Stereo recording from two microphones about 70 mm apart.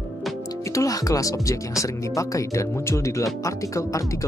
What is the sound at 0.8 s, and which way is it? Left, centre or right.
Speech, left.